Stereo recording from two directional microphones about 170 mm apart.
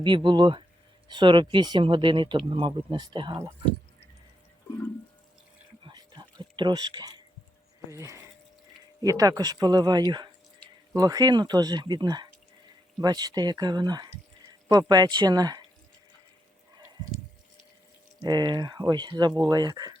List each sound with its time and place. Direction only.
0.0 s speech: 30° right (ahead or behind)
5.8 s a sound: 25° right (ahead or behind)
7.9 s speech: 15° right (ahead or behind)
18.2 s speech: 25° right (ahead or behind)